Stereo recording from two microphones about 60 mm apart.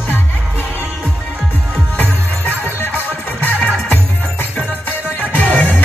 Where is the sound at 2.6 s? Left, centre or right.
Left.